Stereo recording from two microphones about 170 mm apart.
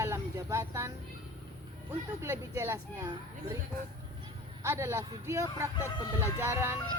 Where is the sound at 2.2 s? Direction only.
15° right (ahead or behind).